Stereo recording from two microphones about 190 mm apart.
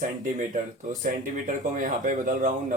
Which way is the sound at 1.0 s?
45° right (ahead or behind).